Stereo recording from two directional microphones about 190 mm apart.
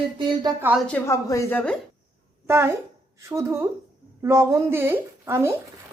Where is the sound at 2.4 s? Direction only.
15° right (ahead or behind).